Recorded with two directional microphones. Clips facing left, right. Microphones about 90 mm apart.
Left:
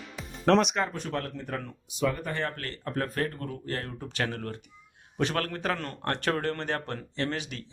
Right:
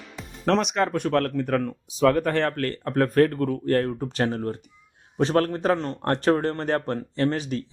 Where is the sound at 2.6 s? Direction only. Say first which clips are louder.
Right 9 dB; 50° right (ahead or behind).